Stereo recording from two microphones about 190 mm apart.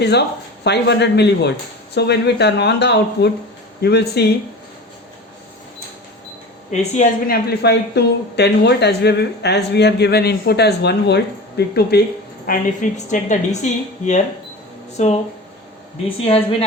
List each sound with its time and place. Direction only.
0.0 s a woman's voice: 60° left (ahead or behind)
6.7 s a woman's voice: 40° left (ahead or behind); by 12.0 s 55° left (ahead or behind)
12.5 s a woman's voice: 40° left (ahead or behind)